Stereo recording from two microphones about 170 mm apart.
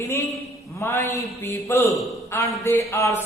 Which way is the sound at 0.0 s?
15° left (ahead or behind).